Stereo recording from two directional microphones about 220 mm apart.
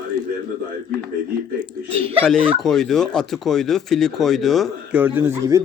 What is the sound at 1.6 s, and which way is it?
Chuckle, 25° right (ahead or behind).